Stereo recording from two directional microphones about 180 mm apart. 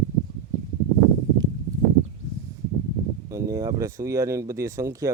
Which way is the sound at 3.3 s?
15° right (ahead or behind).